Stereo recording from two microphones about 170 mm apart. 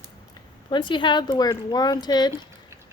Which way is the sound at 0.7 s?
30° left (ahead or behind).